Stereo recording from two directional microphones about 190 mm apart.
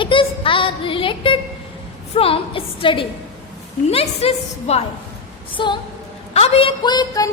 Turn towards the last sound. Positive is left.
turn(degrees=20)  # may be behind; listen again after turning